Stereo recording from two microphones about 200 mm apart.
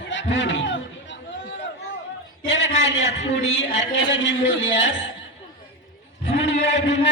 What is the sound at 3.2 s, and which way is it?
A man's voice, 65° left (ahead or behind).